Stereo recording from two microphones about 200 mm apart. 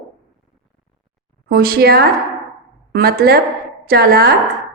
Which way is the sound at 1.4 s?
50° right (ahead or behind).